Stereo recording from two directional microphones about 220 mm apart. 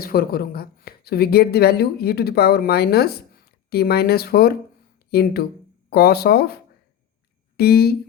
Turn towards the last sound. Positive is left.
turn(degrees=45)  # may be behind; listen again after turning